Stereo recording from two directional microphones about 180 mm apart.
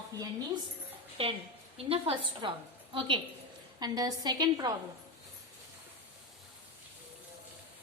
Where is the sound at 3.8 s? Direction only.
20° right (ahead or behind).